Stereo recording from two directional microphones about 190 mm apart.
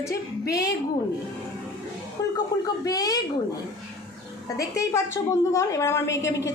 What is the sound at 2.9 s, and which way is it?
Speech, 20° left (ahead or behind).